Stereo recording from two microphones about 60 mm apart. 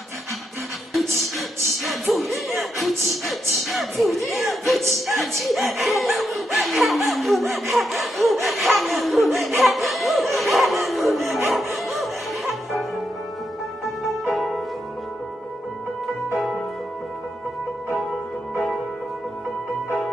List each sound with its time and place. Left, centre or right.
0.9 s a man's voice: centre
7.7 s laughter: centre
14.0 s music: centre
16.3 s music: centre